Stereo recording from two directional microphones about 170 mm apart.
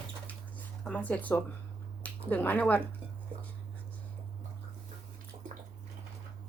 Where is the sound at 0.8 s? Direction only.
10° left (ahead or behind).